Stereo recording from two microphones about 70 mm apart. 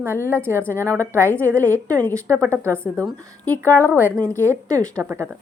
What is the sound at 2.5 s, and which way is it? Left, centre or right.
Speech, right.